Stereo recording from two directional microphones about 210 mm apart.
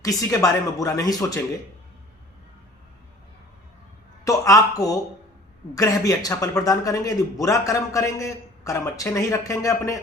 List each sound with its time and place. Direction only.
0.0 s speech: 15° left (ahead or behind)
4.3 s speech: 15° left (ahead or behind)